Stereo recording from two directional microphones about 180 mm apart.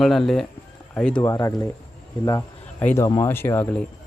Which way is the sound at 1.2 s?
20° left (ahead or behind).